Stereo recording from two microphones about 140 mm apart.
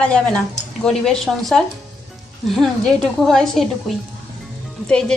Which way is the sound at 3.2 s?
Centre (ahead or behind).